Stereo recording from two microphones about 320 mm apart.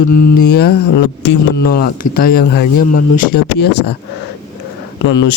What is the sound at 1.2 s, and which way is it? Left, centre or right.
Speech, left.